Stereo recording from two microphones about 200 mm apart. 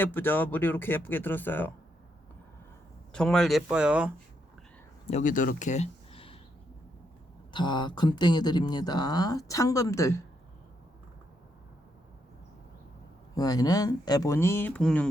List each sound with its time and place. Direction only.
0.0 s speech: 10° left (ahead or behind)
3.1 s speech: 5° left (ahead or behind)
5.0 s speech: 35° left (ahead or behind)
7.5 s speech: 25° left (ahead or behind)
13.3 s speech: 20° left (ahead or behind); by 15.1 s 5° left (ahead or behind)